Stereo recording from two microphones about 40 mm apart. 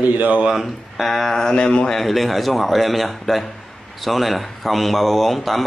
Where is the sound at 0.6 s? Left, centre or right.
Centre.